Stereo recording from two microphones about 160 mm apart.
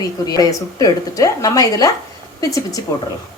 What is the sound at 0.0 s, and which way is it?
A woman's voice, 25° left (ahead or behind).